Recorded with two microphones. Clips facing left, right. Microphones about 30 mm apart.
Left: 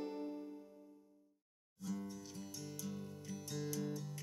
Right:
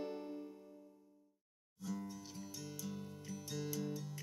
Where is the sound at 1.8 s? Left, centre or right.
Centre.